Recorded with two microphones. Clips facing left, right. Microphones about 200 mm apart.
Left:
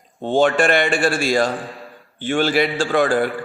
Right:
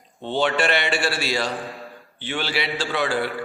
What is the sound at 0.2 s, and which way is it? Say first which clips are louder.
A man's voice: left 6 dB; 45° left (ahead or behind).